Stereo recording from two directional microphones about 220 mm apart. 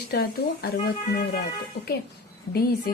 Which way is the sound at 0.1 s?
45° left (ahead or behind).